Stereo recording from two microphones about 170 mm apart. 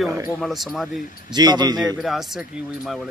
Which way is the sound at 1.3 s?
25° right (ahead or behind).